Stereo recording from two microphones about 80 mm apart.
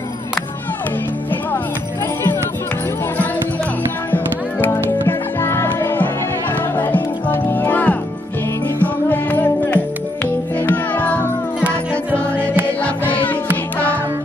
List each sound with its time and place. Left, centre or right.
4.1 s music: left
12.8 s music: centre